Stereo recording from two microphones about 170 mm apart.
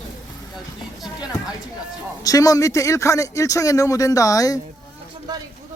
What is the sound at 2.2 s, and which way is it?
Speech, 20° left (ahead or behind).